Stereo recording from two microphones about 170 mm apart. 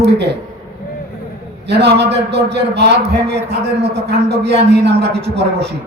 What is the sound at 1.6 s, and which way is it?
A man's voice, 80° right.